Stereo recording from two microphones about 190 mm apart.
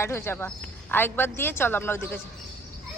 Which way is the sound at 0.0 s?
15° left (ahead or behind).